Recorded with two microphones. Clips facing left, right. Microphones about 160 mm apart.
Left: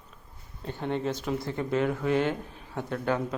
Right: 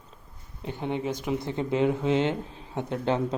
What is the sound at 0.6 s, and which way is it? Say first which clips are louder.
Speech: even; 15° right (ahead or behind).